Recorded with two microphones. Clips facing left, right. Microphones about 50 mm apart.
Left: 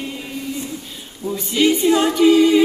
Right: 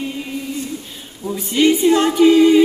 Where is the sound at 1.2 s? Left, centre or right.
Centre.